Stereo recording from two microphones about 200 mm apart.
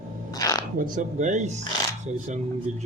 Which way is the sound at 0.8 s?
40° right (ahead or behind).